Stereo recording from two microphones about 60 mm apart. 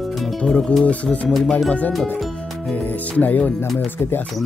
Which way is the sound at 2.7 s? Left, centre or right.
Left.